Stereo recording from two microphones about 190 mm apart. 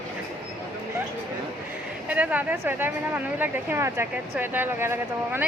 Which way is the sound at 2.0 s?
10° right (ahead or behind).